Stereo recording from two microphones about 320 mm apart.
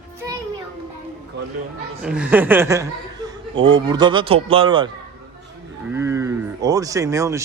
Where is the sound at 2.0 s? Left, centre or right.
Centre.